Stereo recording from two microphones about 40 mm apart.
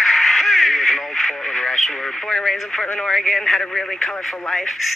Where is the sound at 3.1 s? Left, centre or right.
Centre.